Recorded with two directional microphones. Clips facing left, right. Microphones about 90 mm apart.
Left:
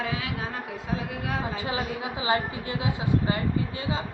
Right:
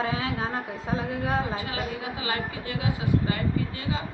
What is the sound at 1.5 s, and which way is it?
A woman's voice, 25° left (ahead or behind).